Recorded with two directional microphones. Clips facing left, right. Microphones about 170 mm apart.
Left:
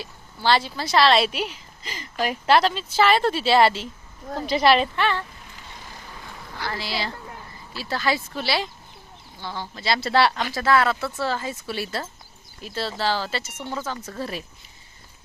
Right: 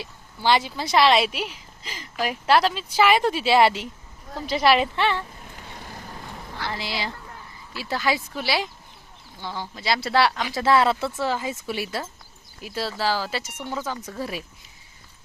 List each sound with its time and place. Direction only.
0.0 s a woman's voice: 15° right (ahead or behind)
4.4 s speech: 5° right (ahead or behind)
4.9 s a woman's voice: 25° right (ahead or behind)
5.5 s vehicle: 50° right (ahead or behind)
6.7 s a woman's voice: 20° right (ahead or behind)
10.5 s a woman's voice: 25° right (ahead or behind); by 14.4 s 10° right (ahead or behind)